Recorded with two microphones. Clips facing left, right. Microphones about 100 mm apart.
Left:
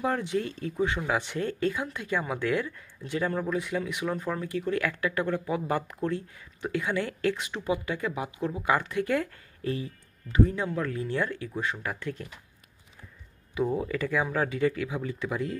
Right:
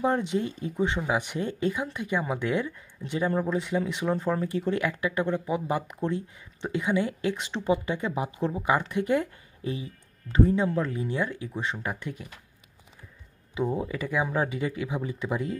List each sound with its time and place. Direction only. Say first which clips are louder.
0.0 s speech: right 2 dB; 20° right (ahead or behind)
7.4 s speech: right 3 dB; 30° right (ahead or behind)
13.7 s speech: left 1 dB; 15° right (ahead or behind)